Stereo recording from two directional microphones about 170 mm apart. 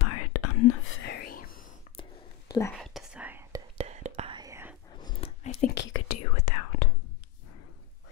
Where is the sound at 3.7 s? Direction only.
40° right (ahead or behind).